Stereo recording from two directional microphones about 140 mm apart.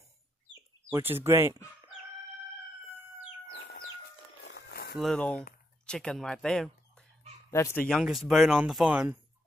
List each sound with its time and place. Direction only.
0.9 s speech: 15° right (ahead or behind)
3.6 s chicken: 90° left
4.9 s speech: 5° left (ahead or behind)
7.5 s speech: 20° left (ahead or behind)
8.0 s speech: centre (ahead or behind)